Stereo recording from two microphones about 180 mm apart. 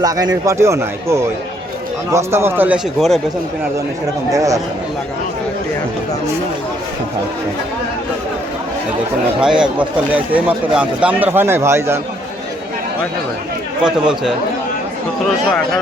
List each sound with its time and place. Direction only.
0.0 s a man's voice: 20° right (ahead or behind)
2.1 s a man's voice: 15° right (ahead or behind)
4.3 s a man's voice: 20° right (ahead or behind)
9.4 s a man's voice: 5° right (ahead or behind)
13.8 s speech: 5° right (ahead or behind)